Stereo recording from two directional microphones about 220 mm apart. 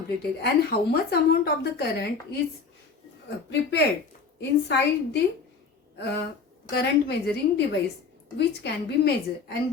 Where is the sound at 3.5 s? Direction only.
50° left (ahead or behind).